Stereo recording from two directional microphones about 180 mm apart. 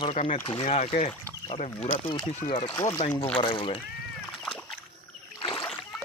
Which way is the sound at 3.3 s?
30° left (ahead or behind).